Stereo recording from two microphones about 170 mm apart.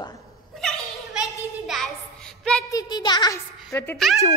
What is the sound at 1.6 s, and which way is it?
Child singing, centre (ahead or behind).